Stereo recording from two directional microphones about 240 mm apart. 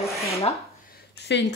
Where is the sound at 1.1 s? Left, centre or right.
Left.